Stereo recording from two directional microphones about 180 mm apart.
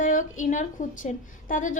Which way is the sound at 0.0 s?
45° left (ahead or behind).